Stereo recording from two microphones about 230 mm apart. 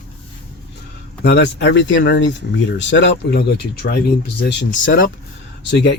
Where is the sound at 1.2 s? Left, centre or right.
Left.